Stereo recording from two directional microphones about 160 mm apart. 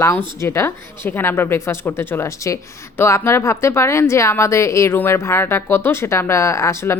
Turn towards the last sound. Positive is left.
turn(degrees=15)  # may be behind; listen again after turning